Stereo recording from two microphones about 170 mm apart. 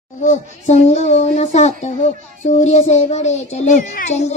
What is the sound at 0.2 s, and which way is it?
A child's voice, 45° left (ahead or behind).